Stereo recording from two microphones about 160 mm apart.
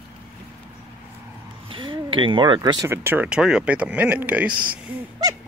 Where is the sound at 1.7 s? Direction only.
30° right (ahead or behind).